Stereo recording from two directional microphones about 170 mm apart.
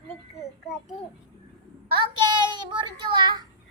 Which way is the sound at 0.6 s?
Centre (ahead or behind).